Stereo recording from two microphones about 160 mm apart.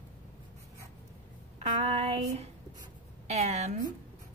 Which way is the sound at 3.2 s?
45° right (ahead or behind).